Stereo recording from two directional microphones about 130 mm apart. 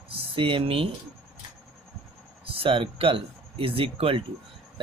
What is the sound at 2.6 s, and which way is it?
Speech, 45° right (ahead or behind).